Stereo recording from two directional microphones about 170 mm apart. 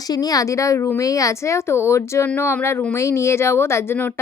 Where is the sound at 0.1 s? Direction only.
20° left (ahead or behind).